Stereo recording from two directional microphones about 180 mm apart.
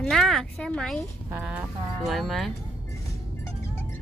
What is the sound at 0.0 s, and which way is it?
Speech, centre (ahead or behind).